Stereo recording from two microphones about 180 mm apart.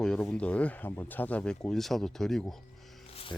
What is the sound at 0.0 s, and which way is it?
Speech, 5° left (ahead or behind).